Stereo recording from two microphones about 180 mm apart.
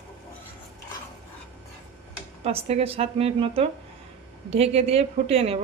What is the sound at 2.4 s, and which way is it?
Speech, 35° right (ahead or behind).